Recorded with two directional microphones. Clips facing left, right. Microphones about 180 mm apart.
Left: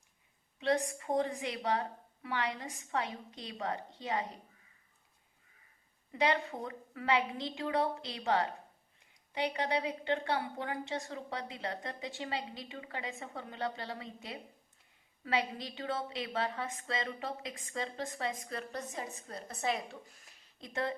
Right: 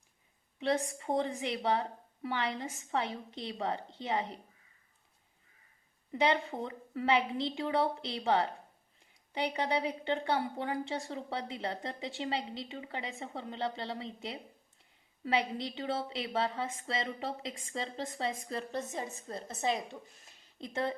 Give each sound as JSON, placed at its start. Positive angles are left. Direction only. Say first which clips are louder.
{"t": 0.6, "sound": "a woman's voice", "louder": "even", "side_deg": -30}
{"t": 6.1, "sound": "a woman's voice", "louder": "right 2 dB", "side_deg": -30}